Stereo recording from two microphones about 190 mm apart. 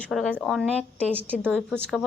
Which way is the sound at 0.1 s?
5° left (ahead or behind).